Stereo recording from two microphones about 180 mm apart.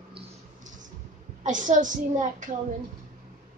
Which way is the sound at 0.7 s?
45° right (ahead or behind).